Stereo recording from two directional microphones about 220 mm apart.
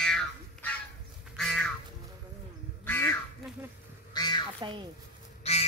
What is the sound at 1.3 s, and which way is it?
Duck, 5° left (ahead or behind).